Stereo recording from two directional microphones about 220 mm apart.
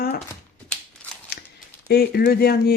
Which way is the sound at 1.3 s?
45° left (ahead or behind).